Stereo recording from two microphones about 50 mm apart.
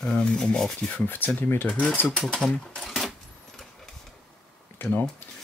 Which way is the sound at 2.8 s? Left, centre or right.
Centre.